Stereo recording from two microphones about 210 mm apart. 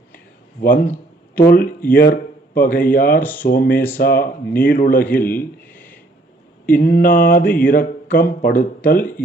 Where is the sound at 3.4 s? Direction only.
45° left (ahead or behind).